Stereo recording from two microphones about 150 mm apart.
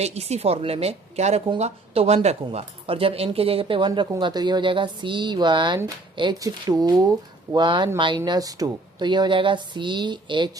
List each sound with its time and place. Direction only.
0.0 s a woman's voice: 45° right (ahead or behind)